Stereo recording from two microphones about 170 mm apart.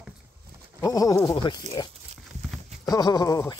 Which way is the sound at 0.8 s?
20° left (ahead or behind).